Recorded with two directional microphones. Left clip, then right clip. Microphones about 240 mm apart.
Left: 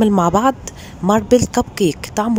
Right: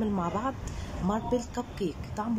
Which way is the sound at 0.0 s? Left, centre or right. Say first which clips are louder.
Left 17 dB; left.